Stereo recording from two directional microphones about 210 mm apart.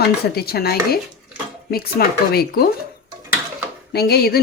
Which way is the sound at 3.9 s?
50° left (ahead or behind).